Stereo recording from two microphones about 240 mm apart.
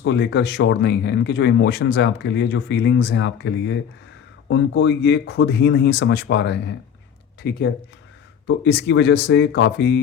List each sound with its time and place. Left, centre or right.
0.0 s speech: left